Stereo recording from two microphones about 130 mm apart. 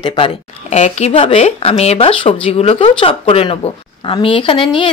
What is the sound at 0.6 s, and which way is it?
Speech, 60° left (ahead or behind).